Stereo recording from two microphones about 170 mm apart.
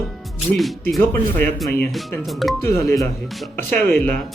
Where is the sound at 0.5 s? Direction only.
Centre (ahead or behind).